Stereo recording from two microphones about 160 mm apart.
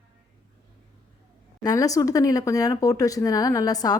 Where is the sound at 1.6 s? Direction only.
20° left (ahead or behind).